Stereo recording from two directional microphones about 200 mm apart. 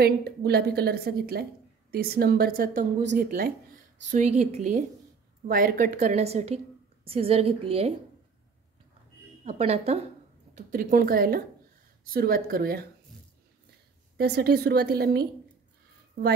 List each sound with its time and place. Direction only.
0.0 s a woman's voice: 50° right (ahead or behind)
4.1 s a woman's voice: 35° right (ahead or behind)
9.4 s a woman's voice: 30° right (ahead or behind)
10.5 s a woman's voice: 45° right (ahead or behind)
14.1 s a woman's voice: 55° right (ahead or behind)